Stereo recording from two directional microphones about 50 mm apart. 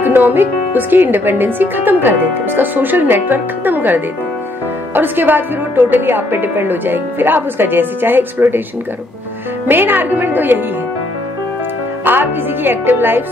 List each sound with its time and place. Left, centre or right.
0.0 s a woman's voice: right
9.7 s speech: right
12.0 s a woman's voice: right